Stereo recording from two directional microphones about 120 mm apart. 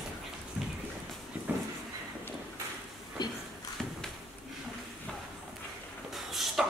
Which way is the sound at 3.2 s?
35° left (ahead or behind).